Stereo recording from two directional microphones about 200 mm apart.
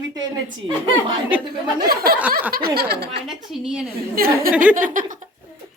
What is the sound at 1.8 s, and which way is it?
Speech, 50° right (ahead or behind).